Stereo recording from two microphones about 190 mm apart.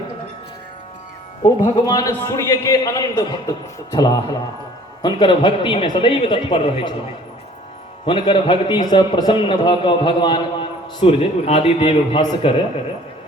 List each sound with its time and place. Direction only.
1.4 s a man's voice: 20° left (ahead or behind)
8.0 s a man's voice: 25° left (ahead or behind)